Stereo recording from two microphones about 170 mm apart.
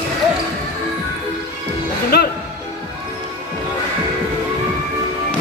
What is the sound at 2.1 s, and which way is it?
Music, 65° left (ahead or behind).